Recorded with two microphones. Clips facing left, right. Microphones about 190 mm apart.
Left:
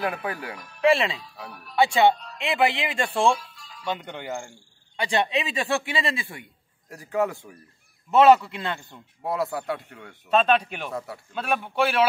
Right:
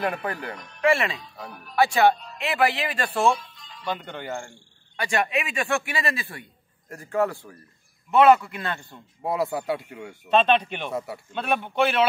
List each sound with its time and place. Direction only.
0.0 s a man's voice: 5° left (ahead or behind)
2.5 s a man's voice: 25° left (ahead or behind)
3.3 s music: 5° left (ahead or behind)
3.9 s speech: 15° left (ahead or behind)
4.9 s a man's voice: 20° left (ahead or behind)
6.9 s speech: centre (ahead or behind)
7.2 s speech: 15° left (ahead or behind)
8.1 s a man's voice: 25° left (ahead or behind)
8.9 s a man's voice: centre (ahead or behind)